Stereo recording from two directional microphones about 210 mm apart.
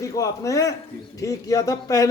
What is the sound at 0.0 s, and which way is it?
Speech, 15° left (ahead or behind).